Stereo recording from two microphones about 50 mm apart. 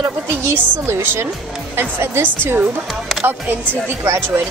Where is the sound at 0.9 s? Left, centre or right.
Right.